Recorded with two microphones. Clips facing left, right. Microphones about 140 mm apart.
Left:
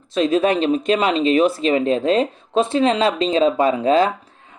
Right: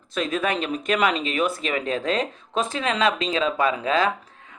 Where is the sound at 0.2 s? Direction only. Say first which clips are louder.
Left 8 dB; 30° left (ahead or behind).